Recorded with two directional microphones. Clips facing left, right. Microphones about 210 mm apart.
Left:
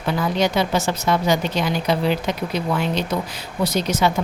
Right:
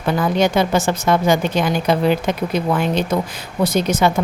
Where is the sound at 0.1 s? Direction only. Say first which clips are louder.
Right 4 dB; 50° right (ahead or behind).